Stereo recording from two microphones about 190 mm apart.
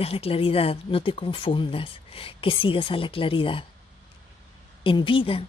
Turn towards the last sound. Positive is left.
turn(degrees=25)  # may be behind; listen again after turning